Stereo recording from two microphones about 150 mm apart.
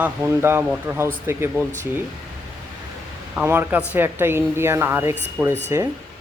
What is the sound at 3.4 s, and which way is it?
A man's voice, 10° right (ahead or behind).